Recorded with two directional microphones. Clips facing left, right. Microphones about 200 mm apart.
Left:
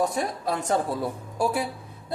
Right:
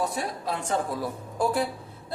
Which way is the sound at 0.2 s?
45° left (ahead or behind).